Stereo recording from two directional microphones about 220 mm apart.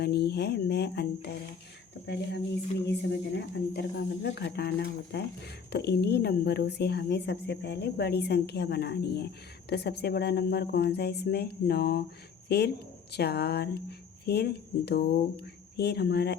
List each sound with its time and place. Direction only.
0.0 s a woman's voice: 50° left (ahead or behind)
2.8 s a woman's voice: 50° left (ahead or behind)